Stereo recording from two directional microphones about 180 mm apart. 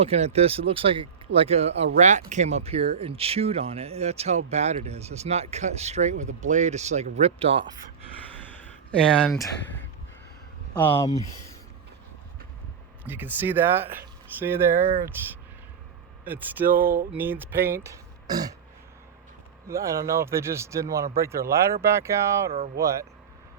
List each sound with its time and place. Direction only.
0.0 s speech: 35° right (ahead or behind)
8.4 s a sound: 5° left (ahead or behind)
9.4 s speech: 10° left (ahead or behind)
13.1 s speech: 10° right (ahead or behind)
19.6 s speech: 15° right (ahead or behind)